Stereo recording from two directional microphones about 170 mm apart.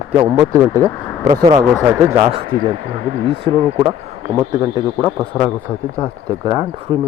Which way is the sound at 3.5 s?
15° left (ahead or behind).